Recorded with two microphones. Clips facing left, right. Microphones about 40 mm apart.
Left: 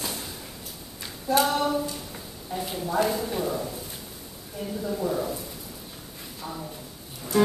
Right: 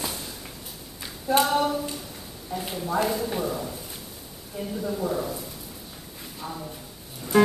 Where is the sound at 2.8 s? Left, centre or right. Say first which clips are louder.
Even; centre.